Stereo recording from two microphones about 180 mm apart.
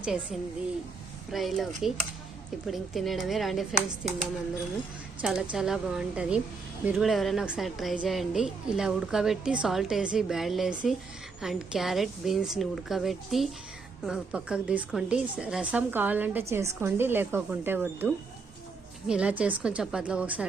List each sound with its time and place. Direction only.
0.0 s a woman's voice: 5° right (ahead or behind)
5.2 s a woman's voice: 5° right (ahead or behind)